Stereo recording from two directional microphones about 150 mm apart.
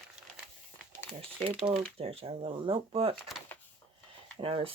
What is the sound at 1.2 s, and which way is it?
Speech, 40° right (ahead or behind).